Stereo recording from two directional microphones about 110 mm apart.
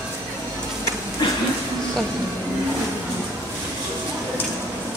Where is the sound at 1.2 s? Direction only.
45° left (ahead or behind).